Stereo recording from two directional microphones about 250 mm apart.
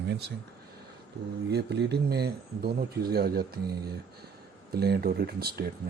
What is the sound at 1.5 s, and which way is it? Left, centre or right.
Speech, right.